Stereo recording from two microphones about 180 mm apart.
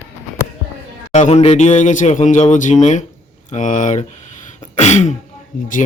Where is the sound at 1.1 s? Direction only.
40° left (ahead or behind).